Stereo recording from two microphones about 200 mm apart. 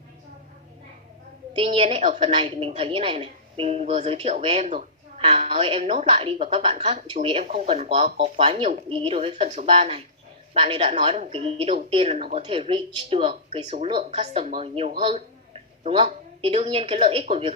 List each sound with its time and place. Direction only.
1.5 s a woman's voice: 30° right (ahead or behind)